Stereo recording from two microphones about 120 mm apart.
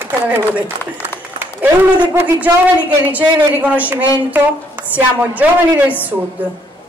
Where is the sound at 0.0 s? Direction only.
15° right (ahead or behind).